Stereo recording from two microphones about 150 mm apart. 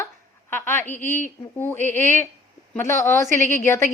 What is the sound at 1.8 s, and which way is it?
Speech, 55° right (ahead or behind).